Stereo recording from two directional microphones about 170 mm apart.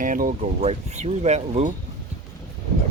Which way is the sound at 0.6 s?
35° right (ahead or behind).